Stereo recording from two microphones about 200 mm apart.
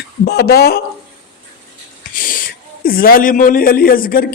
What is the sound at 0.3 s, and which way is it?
Speech, 55° left (ahead or behind).